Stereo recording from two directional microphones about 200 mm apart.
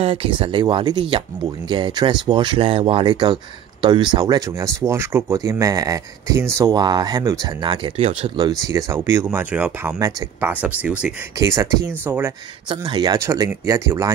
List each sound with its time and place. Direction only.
0.0 s speech: 30° right (ahead or behind); by 12.4 s 10° right (ahead or behind)
12.6 s speech: 25° right (ahead or behind)